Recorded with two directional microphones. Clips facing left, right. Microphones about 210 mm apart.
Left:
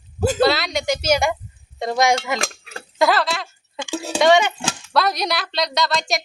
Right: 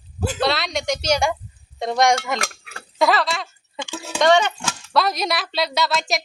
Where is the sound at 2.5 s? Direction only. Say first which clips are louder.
Left 5 dB; 30° left (ahead or behind).